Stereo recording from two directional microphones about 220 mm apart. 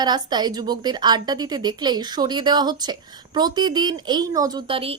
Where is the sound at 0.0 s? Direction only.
20° right (ahead or behind).